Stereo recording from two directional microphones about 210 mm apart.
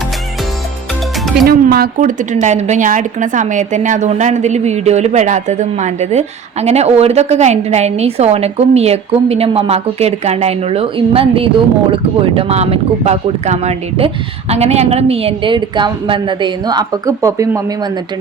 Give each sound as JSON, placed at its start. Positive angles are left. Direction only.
{"t": 1.5, "sound": "a woman's voice", "side_deg": -45}